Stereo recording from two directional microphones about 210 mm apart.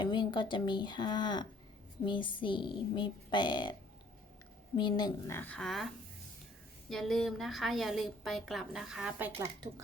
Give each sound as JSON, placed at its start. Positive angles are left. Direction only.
{"t": 0.0, "sound": "speech", "side_deg": 20}
{"t": 4.8, "sound": "speech", "side_deg": 20}
{"t": 5.4, "sound": "a woman's voice", "side_deg": 5}
{"t": 6.9, "sound": "a woman's voice", "side_deg": 0}